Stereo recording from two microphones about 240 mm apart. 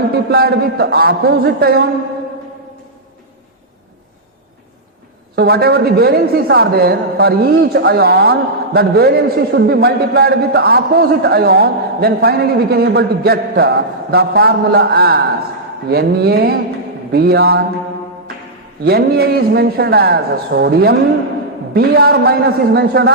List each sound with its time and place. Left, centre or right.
0.3 s a man's voice: right
5.4 s a man's voice: right
18.9 s a man's voice: right